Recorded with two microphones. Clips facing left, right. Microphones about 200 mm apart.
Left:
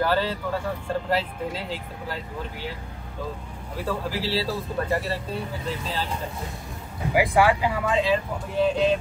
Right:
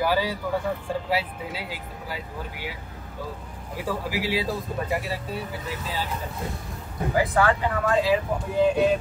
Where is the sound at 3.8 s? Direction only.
10° right (ahead or behind).